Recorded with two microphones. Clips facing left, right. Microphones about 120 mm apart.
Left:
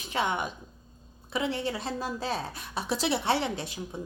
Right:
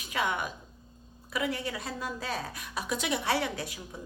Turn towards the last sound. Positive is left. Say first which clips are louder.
# left 2 dB
turn(degrees=25)  # may be behind; listen again after turning